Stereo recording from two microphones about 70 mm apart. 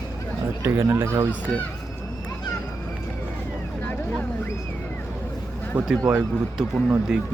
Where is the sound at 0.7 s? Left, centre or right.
Right.